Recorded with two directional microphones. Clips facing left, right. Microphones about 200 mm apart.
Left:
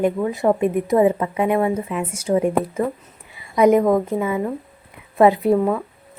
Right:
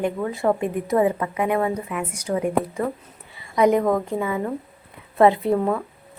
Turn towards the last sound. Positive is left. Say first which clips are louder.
# left 3 dB
turn(degrees=5)  # may be behind; listen again after turning